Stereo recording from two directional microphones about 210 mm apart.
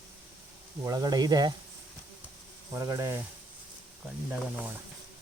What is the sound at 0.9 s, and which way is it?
Speech, 15° right (ahead or behind).